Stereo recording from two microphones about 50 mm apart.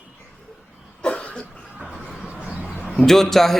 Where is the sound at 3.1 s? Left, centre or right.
Centre.